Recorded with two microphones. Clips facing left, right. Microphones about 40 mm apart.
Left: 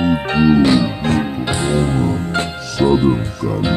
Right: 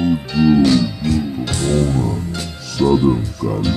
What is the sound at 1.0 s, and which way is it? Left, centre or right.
Music, left.